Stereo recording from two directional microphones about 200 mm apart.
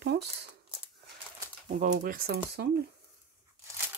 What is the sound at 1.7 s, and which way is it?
Speech, 40° right (ahead or behind).